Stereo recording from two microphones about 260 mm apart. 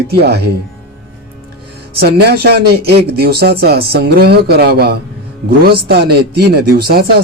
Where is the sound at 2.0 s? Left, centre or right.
Right.